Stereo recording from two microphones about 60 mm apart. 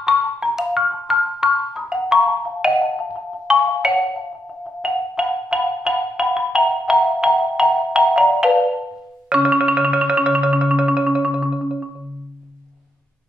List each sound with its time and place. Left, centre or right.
0.0 s marimba: centre
9.3 s music: centre